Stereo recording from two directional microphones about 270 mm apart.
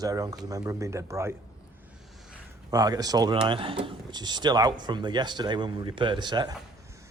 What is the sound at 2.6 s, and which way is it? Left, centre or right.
Speech, centre.